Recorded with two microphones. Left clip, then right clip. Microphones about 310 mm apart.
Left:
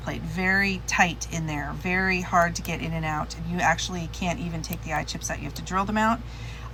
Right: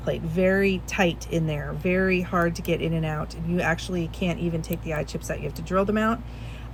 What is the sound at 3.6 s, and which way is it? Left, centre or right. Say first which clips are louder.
Speech: left 4 dB; right.